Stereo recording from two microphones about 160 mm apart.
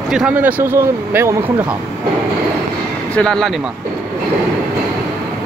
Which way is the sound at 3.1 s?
5° left (ahead or behind).